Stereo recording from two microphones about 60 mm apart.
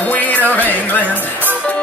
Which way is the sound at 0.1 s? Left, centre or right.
Left.